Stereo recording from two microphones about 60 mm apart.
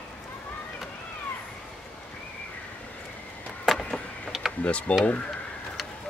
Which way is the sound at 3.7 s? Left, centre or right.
Centre.